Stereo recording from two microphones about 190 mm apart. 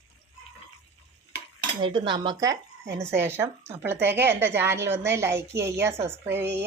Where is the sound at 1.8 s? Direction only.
25° right (ahead or behind).